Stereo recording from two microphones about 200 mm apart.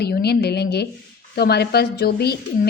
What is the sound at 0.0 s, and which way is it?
A woman's voice, 55° left (ahead or behind).